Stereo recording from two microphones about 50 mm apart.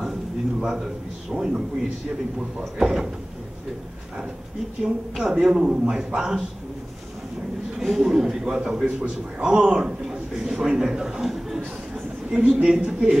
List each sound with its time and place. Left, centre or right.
0.0 s a sound: centre
1.3 s a man's voice: centre
2.8 s a man's voice: centre
4.8 s a man's voice: centre
7.8 s a man's voice: centre